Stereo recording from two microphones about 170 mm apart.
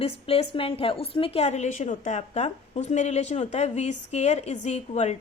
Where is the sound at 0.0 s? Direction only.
35° left (ahead or behind).